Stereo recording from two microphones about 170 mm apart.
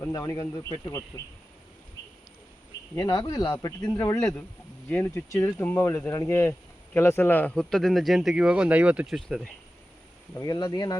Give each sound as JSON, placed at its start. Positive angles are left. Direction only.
{"t": 0.0, "sound": "speech", "side_deg": 20}
{"t": 2.9, "sound": "speech", "side_deg": 20}
{"t": 10.3, "sound": "speech", "side_deg": 25}